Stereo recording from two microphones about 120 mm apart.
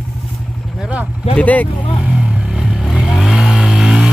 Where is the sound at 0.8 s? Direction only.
10° right (ahead or behind).